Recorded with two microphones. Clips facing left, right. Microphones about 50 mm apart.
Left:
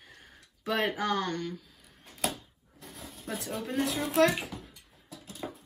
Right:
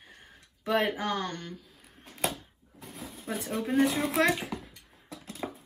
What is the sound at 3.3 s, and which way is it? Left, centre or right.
Speech, centre.